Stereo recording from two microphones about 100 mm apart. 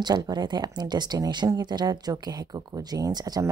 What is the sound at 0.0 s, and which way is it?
A woman's voice, 45° right (ahead or behind).